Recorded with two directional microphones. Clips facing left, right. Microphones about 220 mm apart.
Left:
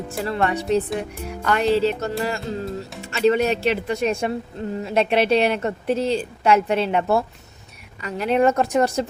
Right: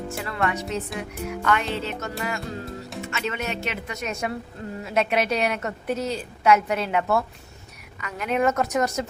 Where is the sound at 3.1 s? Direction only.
35° left (ahead or behind).